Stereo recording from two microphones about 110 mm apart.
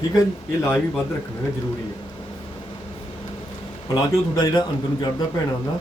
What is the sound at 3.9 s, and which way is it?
A man's voice, 40° left (ahead or behind).